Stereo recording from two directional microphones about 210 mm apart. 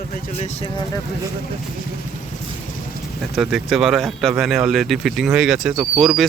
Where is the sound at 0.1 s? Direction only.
30° left (ahead or behind).